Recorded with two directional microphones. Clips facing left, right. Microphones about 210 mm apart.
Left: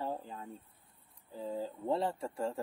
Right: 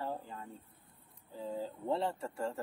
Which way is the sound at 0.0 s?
10° left (ahead or behind).